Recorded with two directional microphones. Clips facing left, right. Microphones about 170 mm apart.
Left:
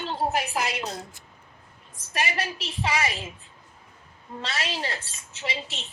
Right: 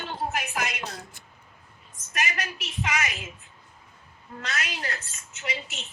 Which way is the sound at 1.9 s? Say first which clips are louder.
Left 3 dB; 30° left (ahead or behind).